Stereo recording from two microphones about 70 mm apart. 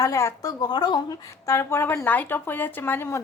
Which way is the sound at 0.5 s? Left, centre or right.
Left.